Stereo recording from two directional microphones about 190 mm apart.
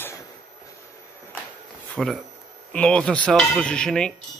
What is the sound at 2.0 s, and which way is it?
Speech, centre (ahead or behind).